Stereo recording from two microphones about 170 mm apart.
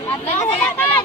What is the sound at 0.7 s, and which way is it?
Speech, 10° left (ahead or behind).